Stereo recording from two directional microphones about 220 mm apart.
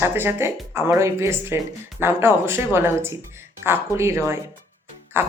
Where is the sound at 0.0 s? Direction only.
10° right (ahead or behind).